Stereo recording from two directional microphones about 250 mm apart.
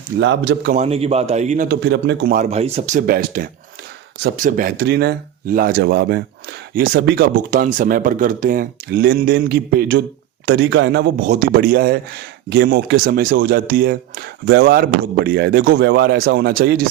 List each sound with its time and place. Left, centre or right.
0.2 s speech: right
0.7 s a man's voice: right